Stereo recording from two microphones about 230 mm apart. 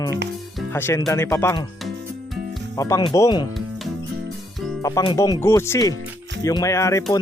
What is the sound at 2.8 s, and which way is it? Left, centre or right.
Speech, centre.